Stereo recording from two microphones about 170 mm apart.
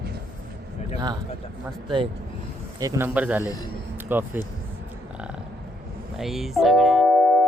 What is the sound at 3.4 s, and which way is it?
Speech, 20° left (ahead or behind).